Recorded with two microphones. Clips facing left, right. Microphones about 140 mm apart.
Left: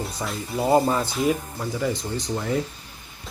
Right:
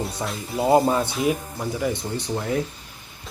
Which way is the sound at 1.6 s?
15° right (ahead or behind).